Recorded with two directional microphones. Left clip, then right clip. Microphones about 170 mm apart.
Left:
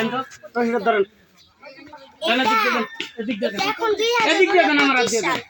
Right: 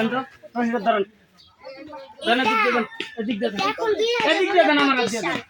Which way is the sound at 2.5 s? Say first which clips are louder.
Left 1 dB; 20° left (ahead or behind).